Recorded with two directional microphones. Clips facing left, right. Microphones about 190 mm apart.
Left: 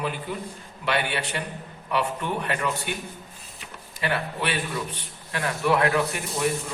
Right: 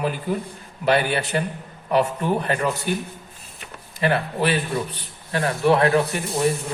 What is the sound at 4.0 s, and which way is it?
A man's voice, 35° right (ahead or behind).